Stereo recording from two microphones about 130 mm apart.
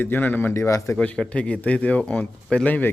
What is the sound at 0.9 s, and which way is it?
A man's voice, 10° left (ahead or behind).